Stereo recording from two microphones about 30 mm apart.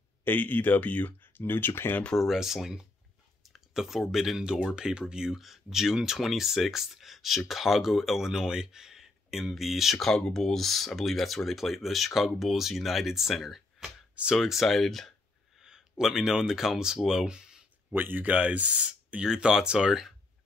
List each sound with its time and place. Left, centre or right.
0.3 s speech: left
1.4 s speech: left
2.3 s speech: centre
4.4 s speech: right
5.3 s speech: centre
8.5 s a sound: right
9.4 s speech: centre
10.0 s speech: centre
14.6 s speech: centre
15.6 s speech: centre
17.9 s speech: right
18.3 s speech: right
19.2 s speech: right